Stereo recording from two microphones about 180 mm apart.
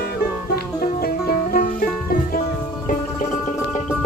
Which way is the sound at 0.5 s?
55° left (ahead or behind).